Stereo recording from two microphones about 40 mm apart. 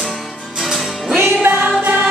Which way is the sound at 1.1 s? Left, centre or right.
Right.